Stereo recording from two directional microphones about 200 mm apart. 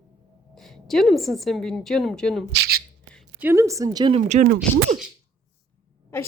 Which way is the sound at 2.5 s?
50° right (ahead or behind).